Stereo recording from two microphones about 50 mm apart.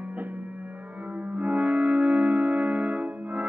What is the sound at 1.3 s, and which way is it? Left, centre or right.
Music, right.